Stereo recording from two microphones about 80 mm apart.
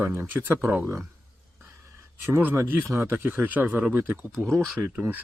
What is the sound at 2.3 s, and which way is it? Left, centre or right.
Speech, right.